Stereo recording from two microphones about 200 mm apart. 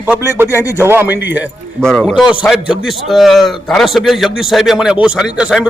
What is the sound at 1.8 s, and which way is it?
A man's voice, 5° left (ahead or behind).